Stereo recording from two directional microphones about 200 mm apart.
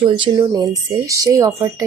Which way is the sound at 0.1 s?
20° right (ahead or behind).